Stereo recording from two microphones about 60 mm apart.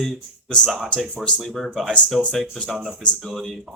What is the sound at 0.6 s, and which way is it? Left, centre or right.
Speech, centre.